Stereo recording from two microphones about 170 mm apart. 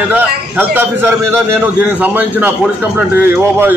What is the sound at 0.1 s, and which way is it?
A man's voice, 10° right (ahead or behind).